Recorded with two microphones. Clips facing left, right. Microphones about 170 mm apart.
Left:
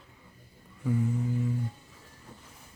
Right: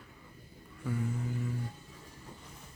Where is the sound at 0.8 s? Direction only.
15° left (ahead or behind).